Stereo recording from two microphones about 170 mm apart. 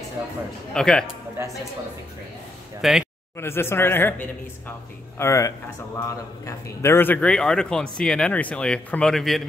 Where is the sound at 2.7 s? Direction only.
Centre (ahead or behind).